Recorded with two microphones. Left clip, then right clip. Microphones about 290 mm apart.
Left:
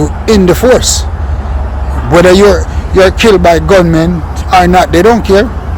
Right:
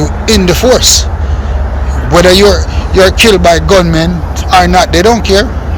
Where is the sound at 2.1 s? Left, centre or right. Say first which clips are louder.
Left 1 dB; left.